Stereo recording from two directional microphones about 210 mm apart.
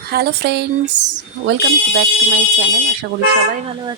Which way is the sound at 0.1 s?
50° right (ahead or behind).